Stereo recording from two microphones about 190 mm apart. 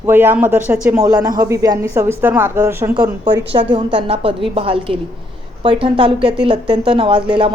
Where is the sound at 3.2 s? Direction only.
25° right (ahead or behind).